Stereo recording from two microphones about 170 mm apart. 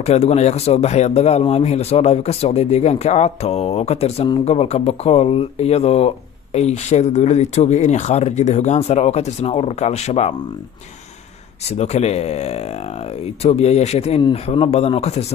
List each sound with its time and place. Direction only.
0.0 s speech: 40° left (ahead or behind)
11.7 s speech: 40° left (ahead or behind)